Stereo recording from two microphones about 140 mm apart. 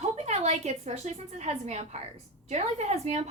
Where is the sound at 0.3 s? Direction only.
50° right (ahead or behind).